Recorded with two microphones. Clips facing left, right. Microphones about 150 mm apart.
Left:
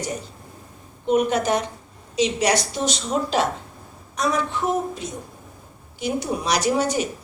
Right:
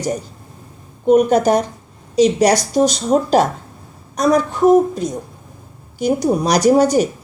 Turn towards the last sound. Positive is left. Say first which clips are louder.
# right 9 dB
turn(degrees=-40)  # may be behind; listen again after turning